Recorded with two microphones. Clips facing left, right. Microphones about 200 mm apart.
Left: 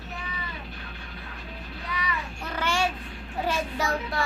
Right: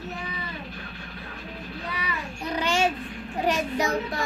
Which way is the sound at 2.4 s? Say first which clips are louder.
Right 3 dB; 15° right (ahead or behind).